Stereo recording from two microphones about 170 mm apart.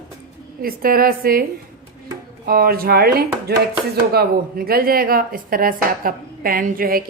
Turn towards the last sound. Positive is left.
turn(degrees=-55)  # may be behind; listen again after turning